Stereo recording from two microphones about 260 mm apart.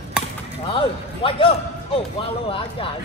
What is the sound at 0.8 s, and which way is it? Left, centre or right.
A man's voice, left.